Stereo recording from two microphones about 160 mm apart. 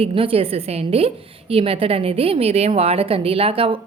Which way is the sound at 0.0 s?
35° right (ahead or behind).